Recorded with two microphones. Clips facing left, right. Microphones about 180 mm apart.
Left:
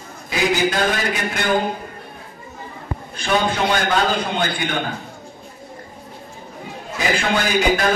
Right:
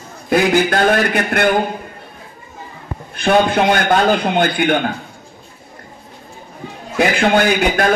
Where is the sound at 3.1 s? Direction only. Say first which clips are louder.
Right 7 dB; 60° right (ahead or behind).